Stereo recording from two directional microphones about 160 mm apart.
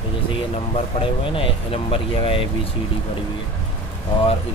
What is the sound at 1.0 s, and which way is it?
Speech, 35° left (ahead or behind).